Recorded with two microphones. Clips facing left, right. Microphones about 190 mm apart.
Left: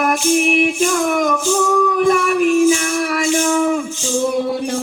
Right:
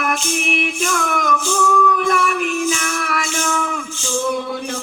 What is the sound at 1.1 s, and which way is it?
Music, 25° left (ahead or behind).